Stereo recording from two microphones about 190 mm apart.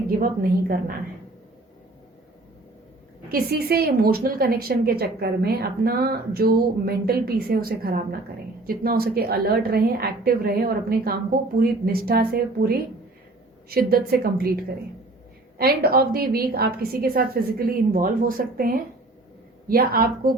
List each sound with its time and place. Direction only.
0.1 s a woman's voice: 50° right (ahead or behind)
3.3 s a woman's voice: 55° right (ahead or behind)
15.5 s a woman's voice: 55° right (ahead or behind)